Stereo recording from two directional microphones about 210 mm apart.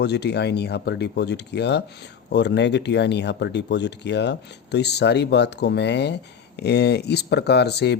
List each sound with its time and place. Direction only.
0.0 s speech: 50° left (ahead or behind)